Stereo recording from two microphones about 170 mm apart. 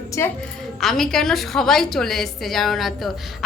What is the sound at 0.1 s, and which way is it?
Speech, 20° left (ahead or behind).